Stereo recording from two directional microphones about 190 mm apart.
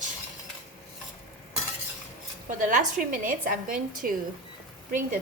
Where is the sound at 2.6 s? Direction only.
40° right (ahead or behind).